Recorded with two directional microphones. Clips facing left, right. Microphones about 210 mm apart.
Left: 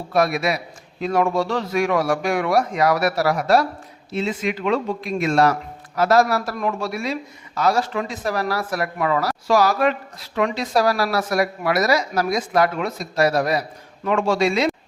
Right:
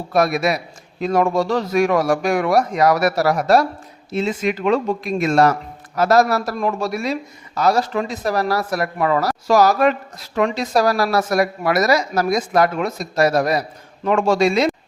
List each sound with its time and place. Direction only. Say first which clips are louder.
0.1 s speech: right 2 dB; 45° right (ahead or behind)